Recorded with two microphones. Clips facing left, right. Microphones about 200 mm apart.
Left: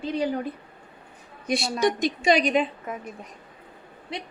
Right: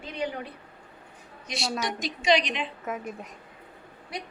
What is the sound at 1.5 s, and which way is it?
A woman's voice, 55° left (ahead or behind).